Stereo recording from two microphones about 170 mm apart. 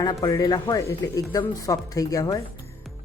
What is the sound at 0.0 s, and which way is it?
A woman's voice, 20° left (ahead or behind).